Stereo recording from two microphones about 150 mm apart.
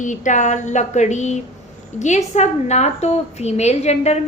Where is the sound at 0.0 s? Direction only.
55° left (ahead or behind).